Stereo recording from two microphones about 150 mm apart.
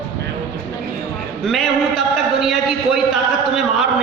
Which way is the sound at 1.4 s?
Centre (ahead or behind).